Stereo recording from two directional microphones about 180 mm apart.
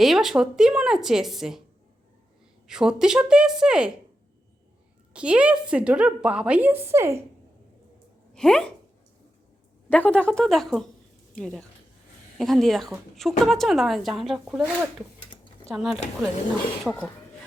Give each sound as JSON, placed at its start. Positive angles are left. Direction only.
{"t": 0.0, "sound": "a woman's voice", "side_deg": 0}
{"t": 2.6, "sound": "a woman's voice", "side_deg": -5}
{"t": 5.1, "sound": "a woman's voice", "side_deg": -5}
{"t": 8.3, "sound": "speech", "side_deg": 5}
{"t": 9.9, "sound": "a woman's voice", "side_deg": 10}
{"t": 15.7, "sound": "a woman's voice", "side_deg": 0}